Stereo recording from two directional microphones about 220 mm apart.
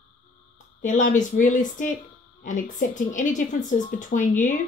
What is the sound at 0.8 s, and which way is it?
Speech, 35° left (ahead or behind).